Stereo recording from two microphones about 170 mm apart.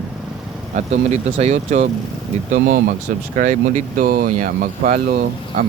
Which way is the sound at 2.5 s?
55° right (ahead or behind).